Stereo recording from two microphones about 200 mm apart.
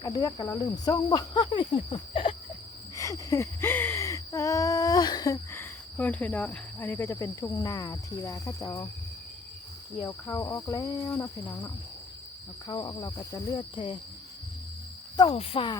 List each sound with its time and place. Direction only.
0.0 s cricket: 20° left (ahead or behind)
2.9 s a sound: 15° left (ahead or behind)
10.0 s speech: 15° left (ahead or behind)
12.6 s cricket: 20° left (ahead or behind)
15.1 s cricket: 25° left (ahead or behind)